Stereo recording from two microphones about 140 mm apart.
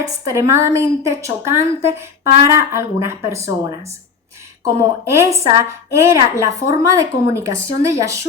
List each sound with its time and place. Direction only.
0.0 s a woman's voice: 20° right (ahead or behind)